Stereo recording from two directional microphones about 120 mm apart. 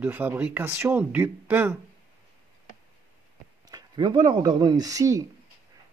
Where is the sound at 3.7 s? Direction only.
40° right (ahead or behind).